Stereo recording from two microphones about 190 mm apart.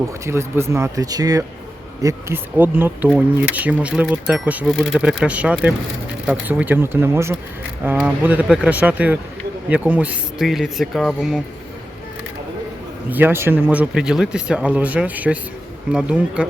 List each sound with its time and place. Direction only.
0.3 s speech: 15° right (ahead or behind)
13.1 s speech: 10° right (ahead or behind)